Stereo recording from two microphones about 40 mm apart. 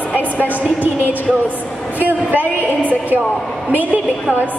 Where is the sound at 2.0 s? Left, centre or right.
Right.